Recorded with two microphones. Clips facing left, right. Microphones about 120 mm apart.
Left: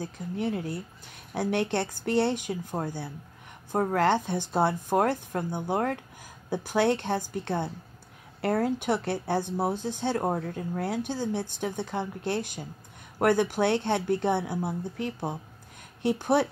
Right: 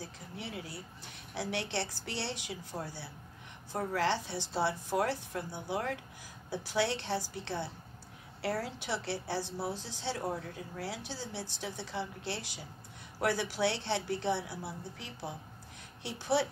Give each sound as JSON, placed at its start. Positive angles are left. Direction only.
{"t": 0.0, "sound": "speech", "side_deg": 50}